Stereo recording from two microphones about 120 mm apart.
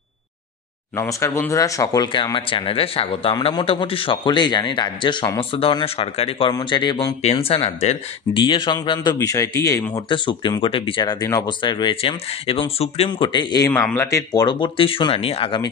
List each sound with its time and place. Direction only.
0.9 s speech: 25° left (ahead or behind); by 6.5 s 50° left (ahead or behind)
6.5 s speech: 40° left (ahead or behind)
7.2 s speech: 55° left (ahead or behind)
8.4 s speech: 40° left (ahead or behind); by 10.0 s 25° left (ahead or behind)
10.0 s speech: 40° left (ahead or behind); by 13.1 s 60° left (ahead or behind)
13.1 s speech: 40° left (ahead or behind)
13.9 s speech: 25° left (ahead or behind); by 15.6 s 50° left (ahead or behind)